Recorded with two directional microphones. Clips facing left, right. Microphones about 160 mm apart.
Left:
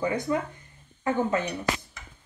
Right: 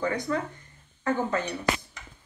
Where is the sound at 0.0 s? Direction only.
15° left (ahead or behind).